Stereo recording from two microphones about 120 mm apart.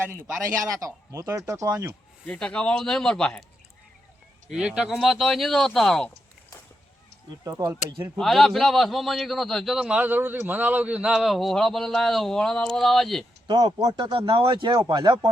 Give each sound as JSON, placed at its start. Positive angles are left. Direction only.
{"t": 0.7, "sound": "speech", "side_deg": -30}
{"t": 2.2, "sound": "a man's voice", "side_deg": 10}
{"t": 4.4, "sound": "a man's voice", "side_deg": -5}
{"t": 7.4, "sound": "speech", "side_deg": -25}
{"t": 8.1, "sound": "a man's voice", "side_deg": 0}
{"t": 13.5, "sound": "speech", "side_deg": -40}